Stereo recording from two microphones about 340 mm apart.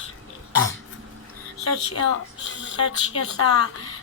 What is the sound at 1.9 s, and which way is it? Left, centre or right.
Speech, left.